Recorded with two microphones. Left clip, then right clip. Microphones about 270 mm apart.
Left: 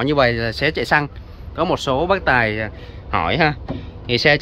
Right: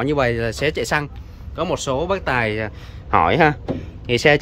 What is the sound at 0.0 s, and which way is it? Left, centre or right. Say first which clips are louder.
Speech: left 2 dB; centre.